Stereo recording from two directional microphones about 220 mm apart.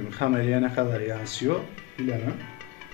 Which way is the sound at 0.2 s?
45° right (ahead or behind).